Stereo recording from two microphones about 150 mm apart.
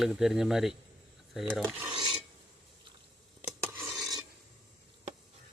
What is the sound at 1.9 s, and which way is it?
Filing, 30° right (ahead or behind).